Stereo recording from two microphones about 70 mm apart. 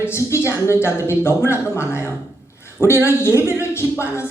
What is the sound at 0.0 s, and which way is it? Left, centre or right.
Speech, left.